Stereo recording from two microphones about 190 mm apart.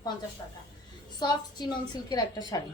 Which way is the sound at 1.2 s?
20° left (ahead or behind).